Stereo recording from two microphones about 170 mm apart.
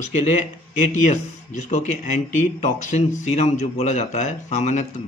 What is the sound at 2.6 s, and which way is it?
Speech, 45° left (ahead or behind).